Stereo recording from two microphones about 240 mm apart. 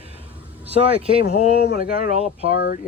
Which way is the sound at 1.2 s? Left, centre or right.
Left.